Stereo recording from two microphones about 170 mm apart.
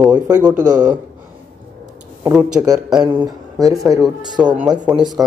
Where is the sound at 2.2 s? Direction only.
5° right (ahead or behind).